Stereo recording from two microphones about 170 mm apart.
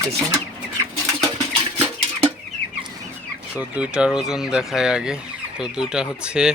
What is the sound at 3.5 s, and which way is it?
Speech, 5° right (ahead or behind).